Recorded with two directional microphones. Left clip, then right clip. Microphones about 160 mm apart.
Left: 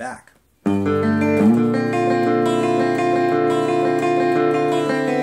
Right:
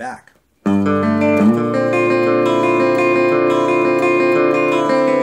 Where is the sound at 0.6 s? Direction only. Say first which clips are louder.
Right 3 dB; 30° right (ahead or behind).